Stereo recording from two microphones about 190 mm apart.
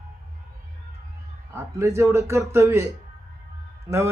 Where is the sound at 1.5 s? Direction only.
15° right (ahead or behind).